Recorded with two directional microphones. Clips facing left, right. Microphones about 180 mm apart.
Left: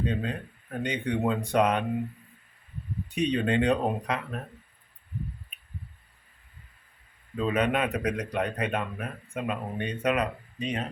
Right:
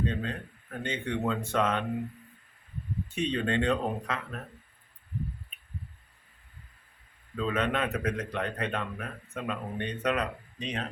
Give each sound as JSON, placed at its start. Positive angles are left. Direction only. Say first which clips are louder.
{"t": 0.0, "sound": "speech", "louder": "left 2 dB", "side_deg": 15}
{"t": 3.1, "sound": "speech", "louder": "left 4 dB", "side_deg": 15}
{"t": 7.3, "sound": "speech", "louder": "left 3 dB", "side_deg": 10}